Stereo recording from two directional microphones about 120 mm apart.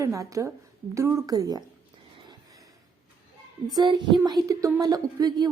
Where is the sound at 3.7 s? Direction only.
35° right (ahead or behind).